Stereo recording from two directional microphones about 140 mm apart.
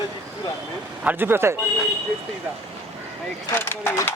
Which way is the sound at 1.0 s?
15° right (ahead or behind).